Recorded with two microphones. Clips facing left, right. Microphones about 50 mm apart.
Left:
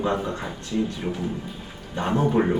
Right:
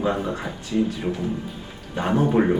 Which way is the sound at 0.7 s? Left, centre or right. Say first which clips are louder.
Right 3 dB; right.